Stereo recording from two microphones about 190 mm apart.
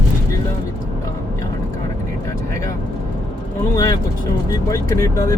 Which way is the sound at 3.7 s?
20° left (ahead or behind).